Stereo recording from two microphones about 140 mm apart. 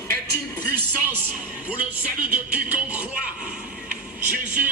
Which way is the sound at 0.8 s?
15° right (ahead or behind).